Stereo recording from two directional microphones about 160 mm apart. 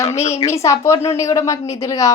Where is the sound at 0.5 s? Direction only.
20° left (ahead or behind).